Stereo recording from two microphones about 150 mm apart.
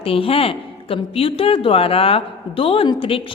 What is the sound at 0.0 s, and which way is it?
A woman's voice, 40° left (ahead or behind).